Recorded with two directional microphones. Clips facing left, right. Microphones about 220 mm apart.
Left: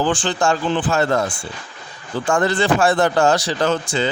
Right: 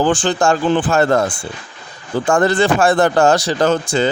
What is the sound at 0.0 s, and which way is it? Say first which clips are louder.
Speech: right 4 dB; 45° right (ahead or behind).